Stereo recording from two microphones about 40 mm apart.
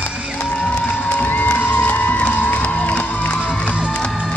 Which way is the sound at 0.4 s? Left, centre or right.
Left.